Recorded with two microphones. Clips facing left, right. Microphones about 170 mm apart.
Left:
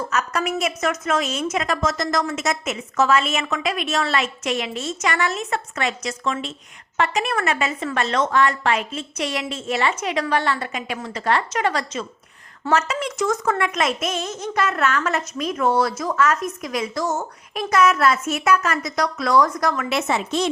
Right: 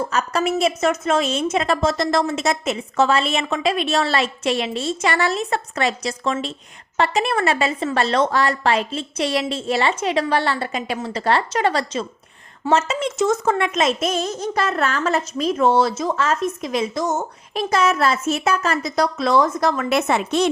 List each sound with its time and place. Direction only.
0.0 s a woman's voice: 30° right (ahead or behind)
19.9 s a woman's voice: 55° right (ahead or behind)